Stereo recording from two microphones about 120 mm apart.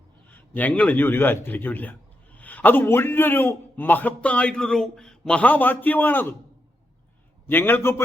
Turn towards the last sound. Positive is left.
turn(degrees=20)  # may be behind; listen again after turning